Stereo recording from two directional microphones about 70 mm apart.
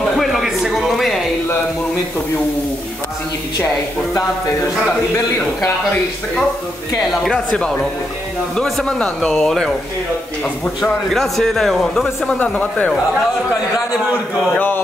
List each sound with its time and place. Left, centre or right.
0.2 s a sound: centre
7.1 s a man's voice: centre
11.1 s a man's voice: centre
12.4 s speech: left